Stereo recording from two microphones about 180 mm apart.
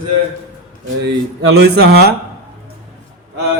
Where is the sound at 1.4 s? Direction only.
65° right (ahead or behind).